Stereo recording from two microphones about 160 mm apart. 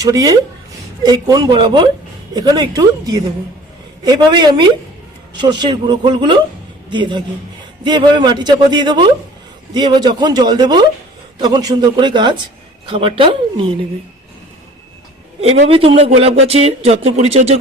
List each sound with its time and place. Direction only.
0.0 s a man's voice: 20° right (ahead or behind)
15.4 s speech: 40° right (ahead or behind)